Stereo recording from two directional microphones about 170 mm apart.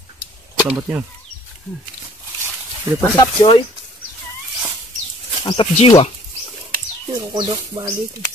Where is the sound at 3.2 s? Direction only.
25° left (ahead or behind).